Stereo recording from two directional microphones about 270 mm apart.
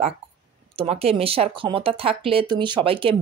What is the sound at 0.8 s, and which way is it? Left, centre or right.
Speech, right.